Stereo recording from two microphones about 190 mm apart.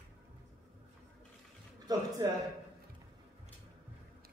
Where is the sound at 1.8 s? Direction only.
20° right (ahead or behind).